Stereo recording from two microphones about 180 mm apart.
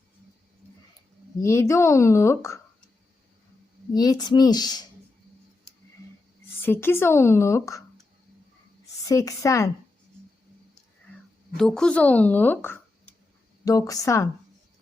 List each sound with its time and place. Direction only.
1.4 s speech: 15° left (ahead or behind)
3.9 s speech: 20° left (ahead or behind)
6.6 s speech: 10° left (ahead or behind)
9.0 s speech: 20° left (ahead or behind)
11.5 s speech: 5° left (ahead or behind)